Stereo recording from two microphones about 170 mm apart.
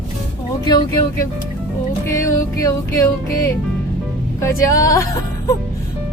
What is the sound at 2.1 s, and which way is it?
Music, 15° left (ahead or behind).